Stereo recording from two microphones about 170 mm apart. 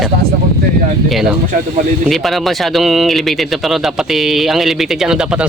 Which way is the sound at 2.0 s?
Centre (ahead or behind).